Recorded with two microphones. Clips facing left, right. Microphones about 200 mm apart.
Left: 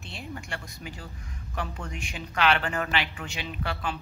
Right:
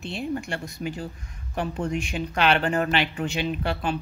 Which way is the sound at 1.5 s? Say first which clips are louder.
Right 9 dB; 25° right (ahead or behind).